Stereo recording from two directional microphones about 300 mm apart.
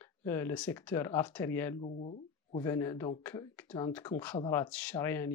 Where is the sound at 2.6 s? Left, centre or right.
Centre.